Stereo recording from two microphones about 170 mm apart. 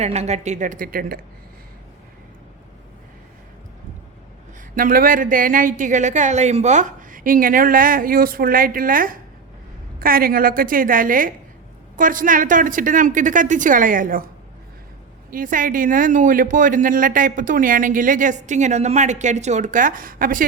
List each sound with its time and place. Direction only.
0.0 s speech: 40° right (ahead or behind); by 1.2 s 60° right (ahead or behind)
4.7 s a woman's voice: 55° right (ahead or behind)
15.3 s speech: 50° right (ahead or behind)